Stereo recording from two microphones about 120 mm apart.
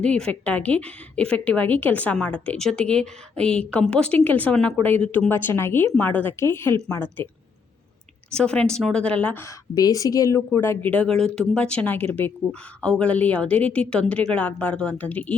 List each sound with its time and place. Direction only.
0.0 s a woman's voice: 10° left (ahead or behind)
8.3 s a woman's voice: 10° left (ahead or behind)
9.4 s a woman's voice: 30° left (ahead or behind); by 15.4 s 10° left (ahead or behind)